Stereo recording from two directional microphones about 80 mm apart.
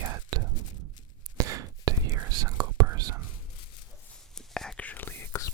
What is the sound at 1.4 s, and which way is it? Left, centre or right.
Whispering, right.